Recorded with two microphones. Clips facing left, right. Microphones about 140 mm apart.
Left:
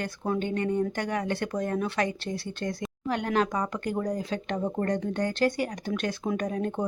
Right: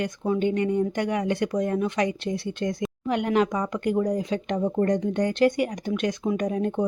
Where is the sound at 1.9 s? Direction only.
20° right (ahead or behind).